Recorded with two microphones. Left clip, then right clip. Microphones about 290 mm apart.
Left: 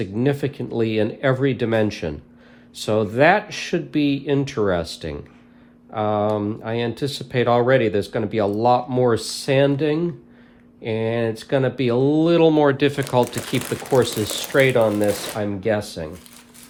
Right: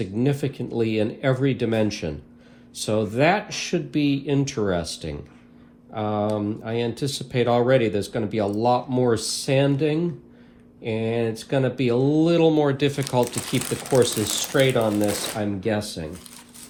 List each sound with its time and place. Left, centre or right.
0.0 s speech: left